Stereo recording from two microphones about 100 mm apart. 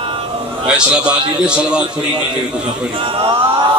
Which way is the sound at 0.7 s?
10° right (ahead or behind).